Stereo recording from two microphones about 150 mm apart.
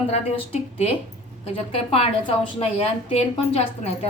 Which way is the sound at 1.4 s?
40° left (ahead or behind).